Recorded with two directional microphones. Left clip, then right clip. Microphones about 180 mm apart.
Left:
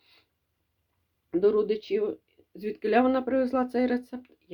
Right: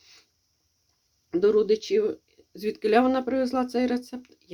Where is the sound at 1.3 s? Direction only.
20° right (ahead or behind).